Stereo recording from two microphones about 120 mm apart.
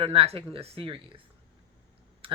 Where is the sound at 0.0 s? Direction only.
50° right (ahead or behind).